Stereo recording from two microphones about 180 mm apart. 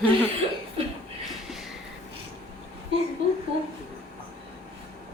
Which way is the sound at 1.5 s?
Centre (ahead or behind).